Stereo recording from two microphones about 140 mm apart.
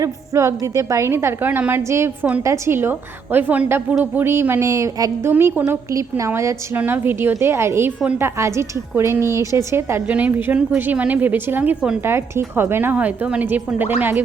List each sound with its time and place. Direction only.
0.0 s a woman's voice: 20° right (ahead or behind)